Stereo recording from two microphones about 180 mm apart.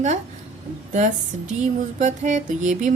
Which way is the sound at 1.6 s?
40° right (ahead or behind).